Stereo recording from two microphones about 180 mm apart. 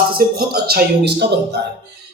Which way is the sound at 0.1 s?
60° right (ahead or behind).